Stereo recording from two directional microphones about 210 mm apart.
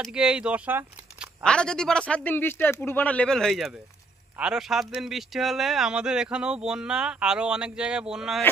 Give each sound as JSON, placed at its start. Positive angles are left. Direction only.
{"t": 0.0, "sound": "speech", "side_deg": -5}
{"t": 1.4, "sound": "speech", "side_deg": 5}